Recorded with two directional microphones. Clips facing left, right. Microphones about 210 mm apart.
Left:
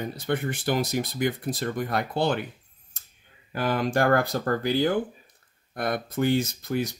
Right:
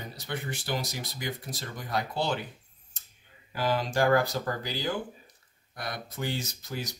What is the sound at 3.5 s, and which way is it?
Speech, 55° left (ahead or behind).